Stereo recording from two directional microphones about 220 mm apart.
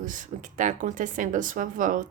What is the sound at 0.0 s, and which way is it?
Speech, 35° right (ahead or behind).